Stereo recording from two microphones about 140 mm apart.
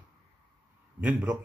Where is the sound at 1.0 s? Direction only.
10° right (ahead or behind).